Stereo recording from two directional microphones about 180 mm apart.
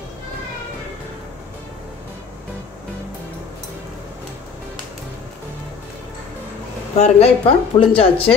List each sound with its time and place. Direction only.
7.0 s speech: 35° left (ahead or behind)